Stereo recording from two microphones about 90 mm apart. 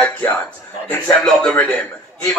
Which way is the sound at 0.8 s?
15° left (ahead or behind).